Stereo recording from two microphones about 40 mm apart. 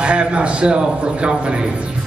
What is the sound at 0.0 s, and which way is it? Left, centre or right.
A man's voice, right.